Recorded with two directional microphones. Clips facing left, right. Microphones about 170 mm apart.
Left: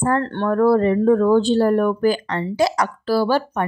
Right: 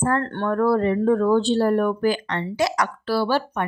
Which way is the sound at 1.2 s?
45° left (ahead or behind).